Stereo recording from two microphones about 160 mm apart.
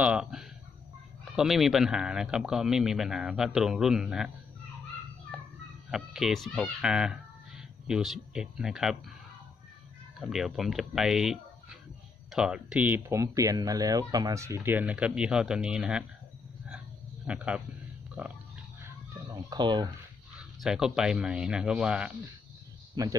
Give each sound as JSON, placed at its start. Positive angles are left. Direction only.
{"t": 0.0, "sound": "speech", "side_deg": -5}
{"t": 5.3, "sound": "a sound", "side_deg": 0}
{"t": 5.9, "sound": "speech", "side_deg": -5}
{"t": 10.2, "sound": "speech", "side_deg": 0}
{"t": 17.3, "sound": "speech", "side_deg": -5}
{"t": 19.3, "sound": "speech", "side_deg": -25}
{"t": 20.3, "sound": "speech", "side_deg": -5}
{"t": 23.0, "sound": "speech", "side_deg": -20}